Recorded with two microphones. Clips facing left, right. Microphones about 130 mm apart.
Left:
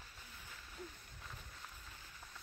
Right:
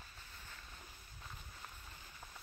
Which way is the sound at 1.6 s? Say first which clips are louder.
Right 1 dB; 15° right (ahead or behind).